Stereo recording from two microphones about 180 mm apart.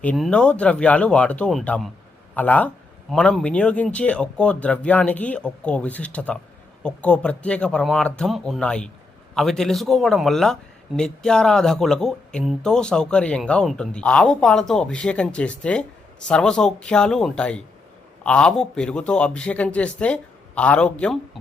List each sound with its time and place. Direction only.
0.0 s speech: 5° left (ahead or behind)